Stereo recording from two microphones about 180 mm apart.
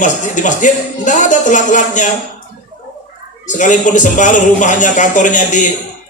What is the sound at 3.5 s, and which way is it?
A man's voice, 45° left (ahead or behind).